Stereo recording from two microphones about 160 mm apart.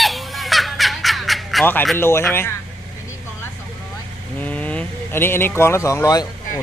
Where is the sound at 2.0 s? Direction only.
15° left (ahead or behind).